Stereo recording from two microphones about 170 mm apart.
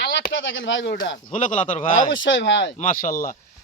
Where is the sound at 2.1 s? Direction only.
90° left.